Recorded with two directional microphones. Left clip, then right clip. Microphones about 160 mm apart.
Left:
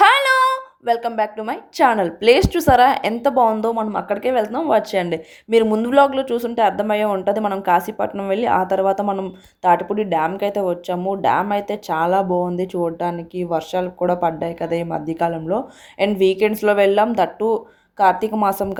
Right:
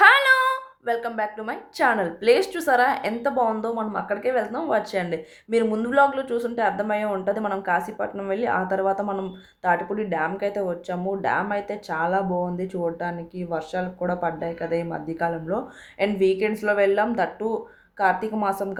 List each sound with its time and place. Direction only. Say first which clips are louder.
0.0 s a woman's voice: left 2 dB; 30° left (ahead or behind)